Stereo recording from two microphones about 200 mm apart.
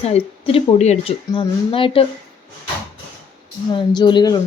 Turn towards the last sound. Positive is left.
turn(degrees=20)  # may be behind; listen again after turning